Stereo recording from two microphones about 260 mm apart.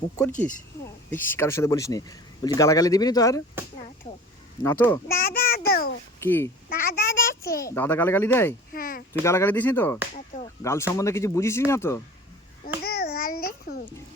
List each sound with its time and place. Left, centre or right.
1.1 s speech: centre
4.6 s speech: centre
5.0 s a child's voice: left
6.1 s a child's voice: centre
6.7 s a child's voice: left
7.6 s speech: centre
8.7 s a sound: left
9.2 s speech: centre
12.8 s babbling: left